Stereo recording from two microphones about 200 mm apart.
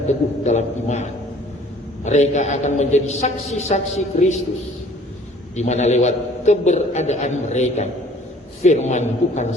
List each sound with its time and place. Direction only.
0.4 s a man's voice: 35° left (ahead or behind)
2.0 s a man's voice: 35° left (ahead or behind)
5.5 s a man's voice: 35° left (ahead or behind)